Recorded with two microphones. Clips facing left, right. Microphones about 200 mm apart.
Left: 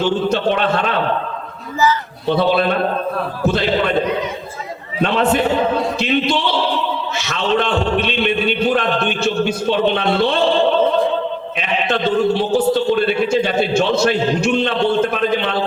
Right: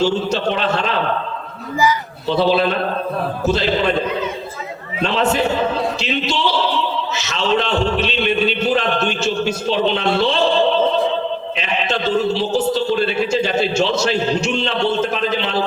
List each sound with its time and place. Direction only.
0.0 s a man's voice: 55° left (ahead or behind)
5.0 s a man's voice: 55° left (ahead or behind)
11.5 s a man's voice: 55° left (ahead or behind)